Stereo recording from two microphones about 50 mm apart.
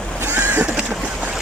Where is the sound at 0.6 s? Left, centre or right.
Right.